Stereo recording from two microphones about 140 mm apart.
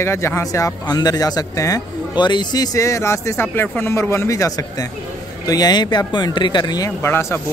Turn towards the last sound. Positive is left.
turn(degrees=20)  # may be behind; listen again after turning